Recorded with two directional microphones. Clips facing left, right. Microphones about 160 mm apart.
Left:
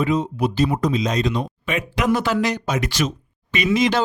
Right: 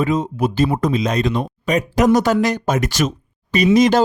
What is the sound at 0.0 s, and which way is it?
Speech, 45° right (ahead or behind).